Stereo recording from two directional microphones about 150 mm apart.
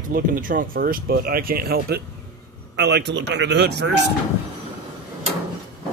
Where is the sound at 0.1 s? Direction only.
70° right (ahead or behind); by 3.3 s 90° right.